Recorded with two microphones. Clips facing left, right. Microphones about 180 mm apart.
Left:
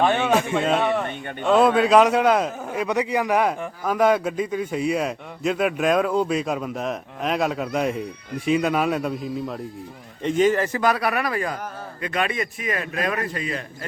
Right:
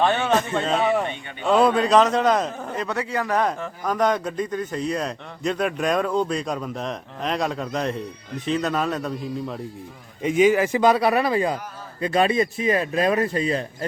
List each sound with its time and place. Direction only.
0.0 s a man's voice: 10° left (ahead or behind)
10.2 s a man's voice: 5° right (ahead or behind)
10.8 s a man's voice: 25° right (ahead or behind)